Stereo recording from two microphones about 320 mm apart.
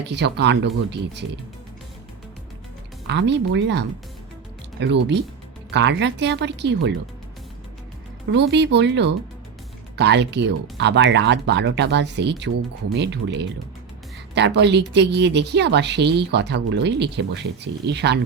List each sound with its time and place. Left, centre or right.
0.1 s a woman's voice: right
3.1 s a woman's voice: right
8.3 s a woman's voice: right